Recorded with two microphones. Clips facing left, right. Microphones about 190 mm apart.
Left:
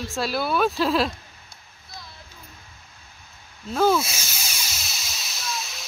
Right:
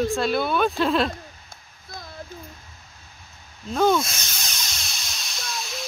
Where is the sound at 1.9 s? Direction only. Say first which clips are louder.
Right 4 dB; 50° right (ahead or behind).